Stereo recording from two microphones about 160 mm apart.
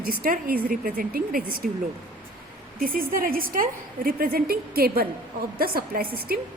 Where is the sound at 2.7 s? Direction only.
60° right (ahead or behind).